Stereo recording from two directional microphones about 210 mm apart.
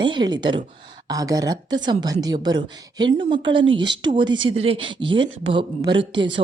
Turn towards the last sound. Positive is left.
turn(degrees=-25)  # may be behind; listen again after turning